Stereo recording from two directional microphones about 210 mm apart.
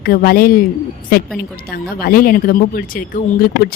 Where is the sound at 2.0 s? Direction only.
45° left (ahead or behind).